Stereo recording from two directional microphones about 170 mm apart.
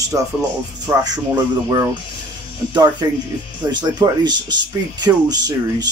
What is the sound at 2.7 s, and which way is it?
Speech, 25° right (ahead or behind).